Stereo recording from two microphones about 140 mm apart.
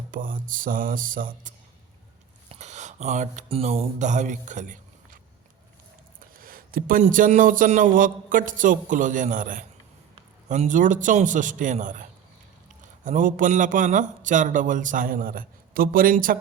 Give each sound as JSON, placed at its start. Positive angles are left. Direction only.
{"t": 0.1, "sound": "speech", "side_deg": -80}
{"t": 2.5, "sound": "speech", "side_deg": -55}
{"t": 6.1, "sound": "a sound", "side_deg": -90}
{"t": 7.0, "sound": "a man's voice", "side_deg": -65}
{"t": 13.1, "sound": "speech", "side_deg": -70}